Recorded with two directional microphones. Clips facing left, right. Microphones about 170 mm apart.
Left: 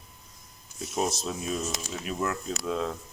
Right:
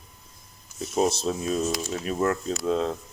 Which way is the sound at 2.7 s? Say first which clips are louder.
Right 5 dB; 30° right (ahead or behind).